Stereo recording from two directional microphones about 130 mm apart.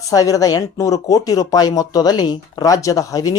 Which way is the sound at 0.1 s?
25° left (ahead or behind).